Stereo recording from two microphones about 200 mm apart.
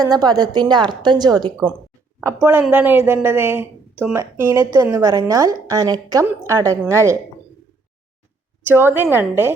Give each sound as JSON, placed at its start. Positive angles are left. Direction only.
{"t": 0.0, "sound": "a woman's voice", "side_deg": -20}
{"t": 8.6, "sound": "a woman's voice", "side_deg": -10}